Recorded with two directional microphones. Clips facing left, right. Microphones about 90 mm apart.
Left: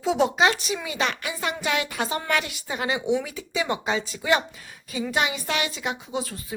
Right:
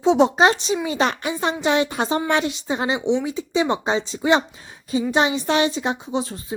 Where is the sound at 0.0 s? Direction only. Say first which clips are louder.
Right 5 dB; 30° right (ahead or behind).